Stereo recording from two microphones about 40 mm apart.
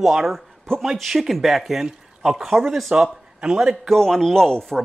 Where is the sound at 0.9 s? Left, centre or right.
Centre.